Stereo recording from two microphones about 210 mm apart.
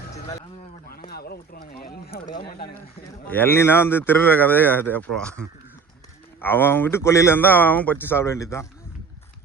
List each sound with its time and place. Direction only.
1.1 s speech: 45° left (ahead or behind)
3.2 s speech: 10° left (ahead or behind)
6.4 s speech: 10° left (ahead or behind)